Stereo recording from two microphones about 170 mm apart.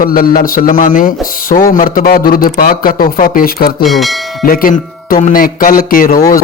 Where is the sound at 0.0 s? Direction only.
60° left (ahead or behind).